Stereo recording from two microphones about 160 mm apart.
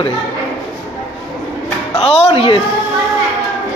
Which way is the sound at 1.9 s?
40° left (ahead or behind).